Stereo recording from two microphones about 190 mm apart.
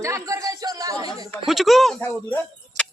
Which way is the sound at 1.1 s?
Centre (ahead or behind).